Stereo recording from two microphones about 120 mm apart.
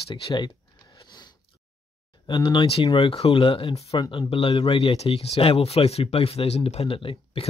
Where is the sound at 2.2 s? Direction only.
45° left (ahead or behind).